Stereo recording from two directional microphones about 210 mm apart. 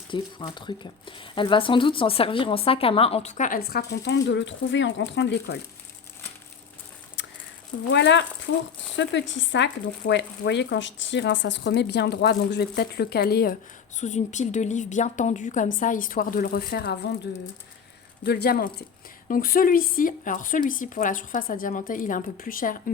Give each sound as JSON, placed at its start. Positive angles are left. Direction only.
{"t": 0.1, "sound": "speech", "side_deg": 25}
{"t": 7.2, "sound": "a sound", "side_deg": 60}
{"t": 7.9, "sound": "speech", "side_deg": 55}
{"t": 14.0, "sound": "speech", "side_deg": 35}
{"t": 18.3, "sound": "speech", "side_deg": 50}